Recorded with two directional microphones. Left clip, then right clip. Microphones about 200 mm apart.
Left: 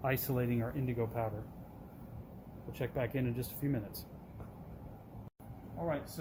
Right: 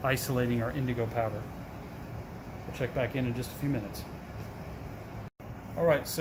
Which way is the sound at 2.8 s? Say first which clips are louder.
Right 5 dB; 45° left (ahead or behind).